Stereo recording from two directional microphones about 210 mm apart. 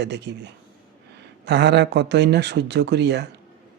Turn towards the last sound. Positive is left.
turn(degrees=-55)  # may be behind; listen again after turning